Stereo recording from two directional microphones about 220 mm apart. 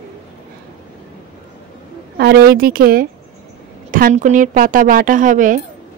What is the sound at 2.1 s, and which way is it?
A woman's voice, 45° right (ahead or behind).